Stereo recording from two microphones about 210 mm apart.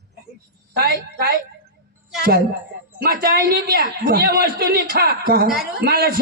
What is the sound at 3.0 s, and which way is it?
A man's voice, 45° right (ahead or behind).